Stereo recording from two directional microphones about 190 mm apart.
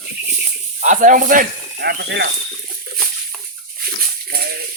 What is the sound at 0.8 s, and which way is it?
Speech, 40° right (ahead or behind).